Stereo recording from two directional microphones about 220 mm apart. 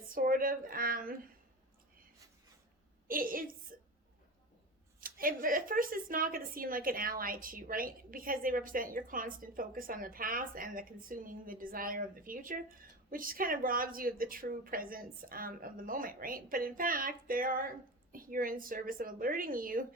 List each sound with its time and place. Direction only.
0.1 s a woman's voice: 40° right (ahead or behind)
3.1 s a woman's voice: 40° right (ahead or behind)
4.9 s a woman's voice: 40° right (ahead or behind)